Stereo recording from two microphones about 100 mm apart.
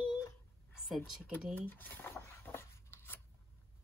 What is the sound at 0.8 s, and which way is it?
Speech, 5° right (ahead or behind).